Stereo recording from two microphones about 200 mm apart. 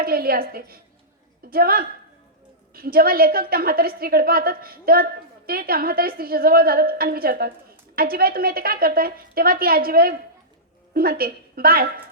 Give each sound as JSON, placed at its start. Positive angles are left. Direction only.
{"t": 0.0, "sound": "a woman's voice", "side_deg": -50}